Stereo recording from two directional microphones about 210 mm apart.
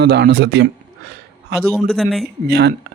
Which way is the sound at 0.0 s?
50° right (ahead or behind).